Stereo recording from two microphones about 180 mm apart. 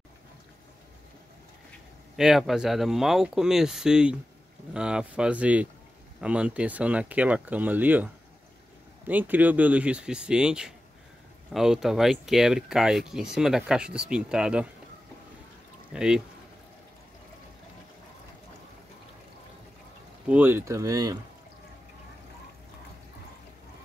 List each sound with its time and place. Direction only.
2.1 s speech: centre (ahead or behind)
15.9 s speech: 5° right (ahead or behind)
20.2 s speech: 10° right (ahead or behind)